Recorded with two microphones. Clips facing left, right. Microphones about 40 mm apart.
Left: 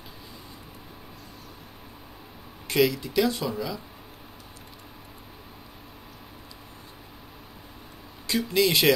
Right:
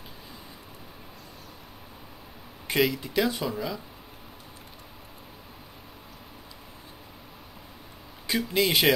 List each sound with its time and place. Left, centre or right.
2.7 s speech: centre
8.3 s speech: right